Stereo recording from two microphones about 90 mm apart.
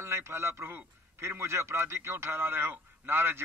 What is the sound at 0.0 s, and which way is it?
A man's voice, 30° right (ahead or behind).